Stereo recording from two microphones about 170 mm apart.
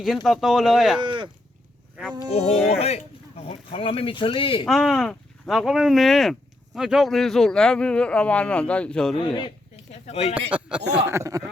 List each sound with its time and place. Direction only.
0.0 s speech: centre (ahead or behind)
1.0 s speech: 30° right (ahead or behind)
2.6 s speech: 40° left (ahead or behind)
4.6 s speech: 5° left (ahead or behind)
9.1 s speech: 25° left (ahead or behind)
9.9 s speech: 40° left (ahead or behind)
10.3 s speech: 5° right (ahead or behind)
11.1 s speech: 20° right (ahead or behind)